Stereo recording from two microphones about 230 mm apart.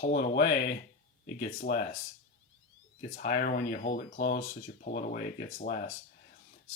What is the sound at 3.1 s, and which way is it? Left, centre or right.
Speech, left.